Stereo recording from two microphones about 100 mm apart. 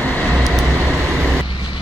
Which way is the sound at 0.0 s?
20° left (ahead or behind).